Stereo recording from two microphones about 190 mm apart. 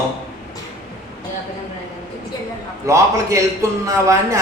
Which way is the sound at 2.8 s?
15° right (ahead or behind).